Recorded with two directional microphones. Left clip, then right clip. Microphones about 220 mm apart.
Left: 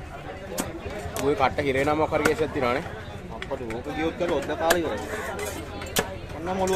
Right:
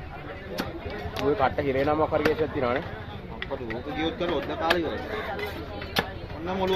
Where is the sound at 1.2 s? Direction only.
20° left (ahead or behind).